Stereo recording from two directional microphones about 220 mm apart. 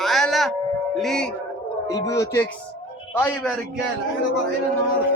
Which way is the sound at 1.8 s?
15° left (ahead or behind).